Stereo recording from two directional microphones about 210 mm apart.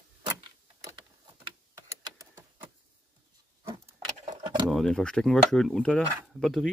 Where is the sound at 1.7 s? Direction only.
15° right (ahead or behind).